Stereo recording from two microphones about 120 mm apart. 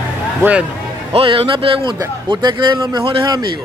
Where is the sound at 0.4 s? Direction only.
10° right (ahead or behind).